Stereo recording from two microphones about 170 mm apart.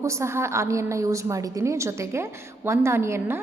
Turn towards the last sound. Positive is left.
turn(degrees=-15)  # may be behind; listen again after turning